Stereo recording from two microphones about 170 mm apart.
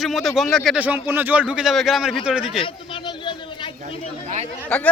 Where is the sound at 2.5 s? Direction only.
30° left (ahead or behind).